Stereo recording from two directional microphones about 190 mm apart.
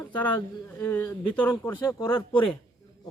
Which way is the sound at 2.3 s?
25° left (ahead or behind).